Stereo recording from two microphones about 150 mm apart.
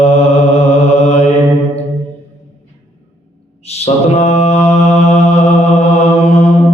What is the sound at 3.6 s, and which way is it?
Mantra, 45° left (ahead or behind).